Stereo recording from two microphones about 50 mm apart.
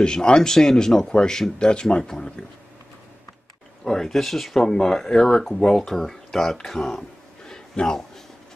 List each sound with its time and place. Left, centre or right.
0.0 s speech: centre
3.8 s speech: centre